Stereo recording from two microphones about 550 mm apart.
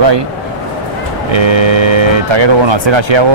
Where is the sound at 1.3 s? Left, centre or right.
Right.